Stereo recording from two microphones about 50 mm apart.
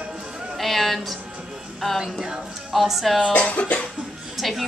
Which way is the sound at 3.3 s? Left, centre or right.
Left.